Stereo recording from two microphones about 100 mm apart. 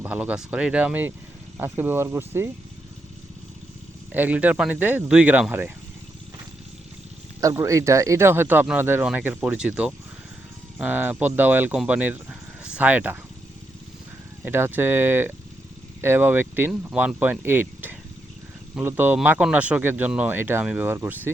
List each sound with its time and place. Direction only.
0.0 s speech: 15° right (ahead or behind)
4.1 s speech: 15° right (ahead or behind)
7.4 s speech: 30° right (ahead or behind)
14.4 s speech: 20° right (ahead or behind)